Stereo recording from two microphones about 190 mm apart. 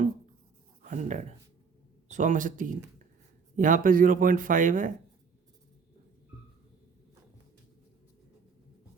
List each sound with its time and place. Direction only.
0.8 s speech: 40° right (ahead or behind)